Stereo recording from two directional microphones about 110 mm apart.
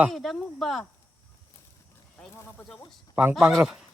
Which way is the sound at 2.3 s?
20° left (ahead or behind).